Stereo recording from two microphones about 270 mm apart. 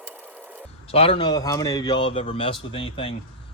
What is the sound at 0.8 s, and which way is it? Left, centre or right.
Speech, left.